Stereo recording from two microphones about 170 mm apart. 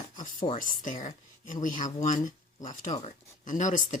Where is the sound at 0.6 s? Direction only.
50° left (ahead or behind).